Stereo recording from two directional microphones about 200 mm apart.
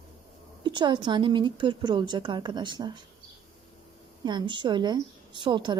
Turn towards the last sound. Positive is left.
turn(degrees=-25)  # may be behind; listen again after turning